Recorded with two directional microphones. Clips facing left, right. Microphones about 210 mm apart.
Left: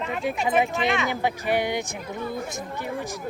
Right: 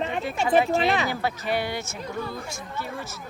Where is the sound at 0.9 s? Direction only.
35° right (ahead or behind).